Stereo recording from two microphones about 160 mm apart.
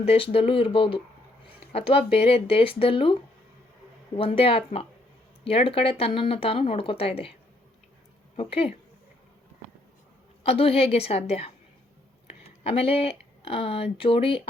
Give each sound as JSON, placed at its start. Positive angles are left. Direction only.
{"t": 0.0, "sound": "speech", "side_deg": 40}
{"t": 8.4, "sound": "speech", "side_deg": 35}
{"t": 10.4, "sound": "speech", "side_deg": 40}